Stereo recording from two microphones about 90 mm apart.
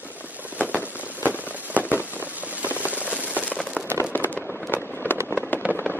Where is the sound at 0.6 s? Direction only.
20° right (ahead or behind).